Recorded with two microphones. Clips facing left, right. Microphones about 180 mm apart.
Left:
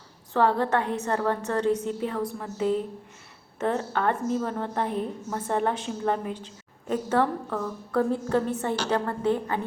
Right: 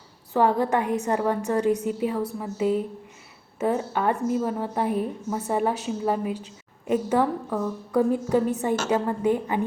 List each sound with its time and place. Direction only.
0.3 s a woman's voice: 10° right (ahead or behind)